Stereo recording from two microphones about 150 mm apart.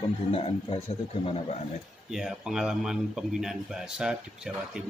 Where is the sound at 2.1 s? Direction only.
5° right (ahead or behind).